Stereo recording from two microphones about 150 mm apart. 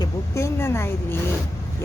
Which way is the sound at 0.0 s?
20° left (ahead or behind).